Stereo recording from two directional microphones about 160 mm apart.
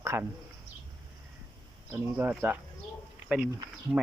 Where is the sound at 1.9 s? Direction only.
15° right (ahead or behind).